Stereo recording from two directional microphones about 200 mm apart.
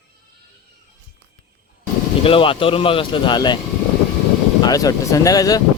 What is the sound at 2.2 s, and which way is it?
Speech, 25° left (ahead or behind).